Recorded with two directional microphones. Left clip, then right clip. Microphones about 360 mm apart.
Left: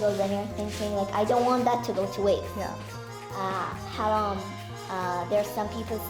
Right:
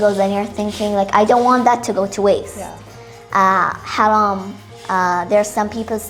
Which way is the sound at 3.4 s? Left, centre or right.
Right.